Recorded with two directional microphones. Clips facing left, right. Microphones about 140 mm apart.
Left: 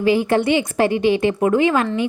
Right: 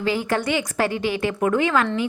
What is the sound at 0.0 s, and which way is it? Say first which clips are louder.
A woman's voice: left 6 dB; 20° left (ahead or behind).